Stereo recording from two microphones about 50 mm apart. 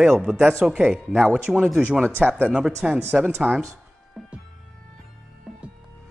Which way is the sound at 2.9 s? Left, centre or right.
Right.